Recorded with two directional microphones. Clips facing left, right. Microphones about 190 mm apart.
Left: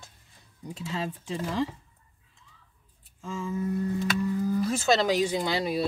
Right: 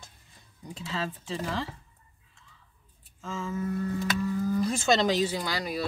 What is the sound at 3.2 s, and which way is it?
Speech, 15° left (ahead or behind).